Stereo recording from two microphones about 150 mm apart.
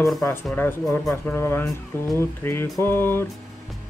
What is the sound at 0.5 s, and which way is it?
Speech, 15° left (ahead or behind).